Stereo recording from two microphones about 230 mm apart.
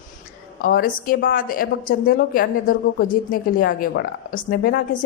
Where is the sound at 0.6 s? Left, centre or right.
Left.